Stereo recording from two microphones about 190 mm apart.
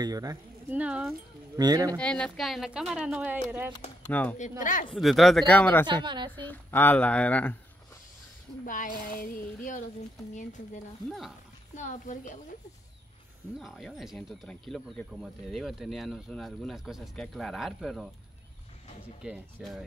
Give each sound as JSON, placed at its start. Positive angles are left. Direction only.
{"t": 0.0, "sound": "speech", "side_deg": -20}
{"t": 0.7, "sound": "speech", "side_deg": -5}
{"t": 1.6, "sound": "speech", "side_deg": -20}
{"t": 2.0, "sound": "speech", "side_deg": 5}
{"t": 4.1, "sound": "speech", "side_deg": 10}
{"t": 6.0, "sound": "speech", "side_deg": -25}
{"t": 6.4, "sound": "speech", "side_deg": 10}
{"t": 8.6, "sound": "a woman's voice", "side_deg": 45}
{"t": 11.1, "sound": "speech", "side_deg": 0}
{"t": 11.7, "sound": "a woman's voice", "side_deg": 40}
{"t": 13.6, "sound": "speech", "side_deg": 0}
{"t": 19.2, "sound": "speech", "side_deg": 0}